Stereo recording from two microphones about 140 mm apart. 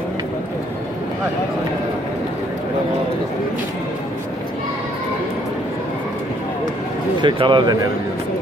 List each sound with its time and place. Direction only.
7.2 s speech: 35° right (ahead or behind)